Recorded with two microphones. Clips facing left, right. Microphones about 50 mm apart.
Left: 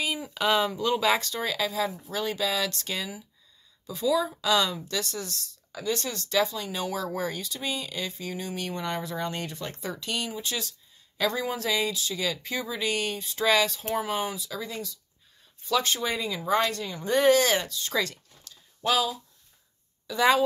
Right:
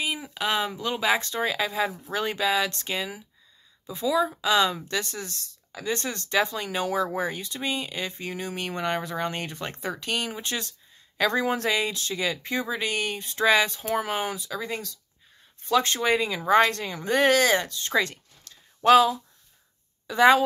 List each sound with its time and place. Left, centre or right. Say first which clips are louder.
0.4 s speech: left 3 dB; centre
1.2 s speech: right 2 dB; right
5.8 s speech: right 1 dB; right
13.5 s speech: right 2 dB; right
18.8 s speech: right 9 dB; right
20.1 s speech: right 4 dB; right